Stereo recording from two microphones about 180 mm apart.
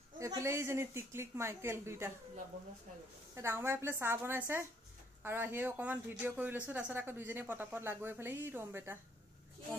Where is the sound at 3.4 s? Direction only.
15° right (ahead or behind).